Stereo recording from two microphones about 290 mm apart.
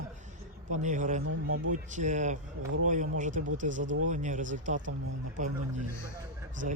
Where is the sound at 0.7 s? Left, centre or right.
Right.